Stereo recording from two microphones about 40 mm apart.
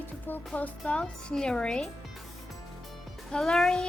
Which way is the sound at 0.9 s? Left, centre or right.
Left.